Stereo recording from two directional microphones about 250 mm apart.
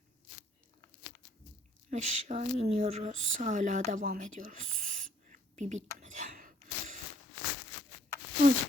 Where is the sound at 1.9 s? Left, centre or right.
Right.